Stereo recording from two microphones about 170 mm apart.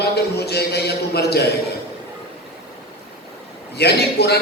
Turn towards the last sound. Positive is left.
turn(degrees=70)  # may be behind; listen again after turning